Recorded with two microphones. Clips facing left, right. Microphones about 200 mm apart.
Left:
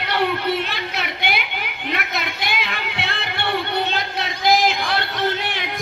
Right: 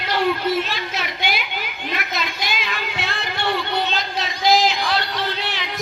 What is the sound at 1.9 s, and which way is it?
Music, 60° left (ahead or behind).